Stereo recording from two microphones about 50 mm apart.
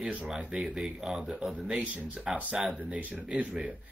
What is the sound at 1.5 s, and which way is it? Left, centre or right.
Speech, right.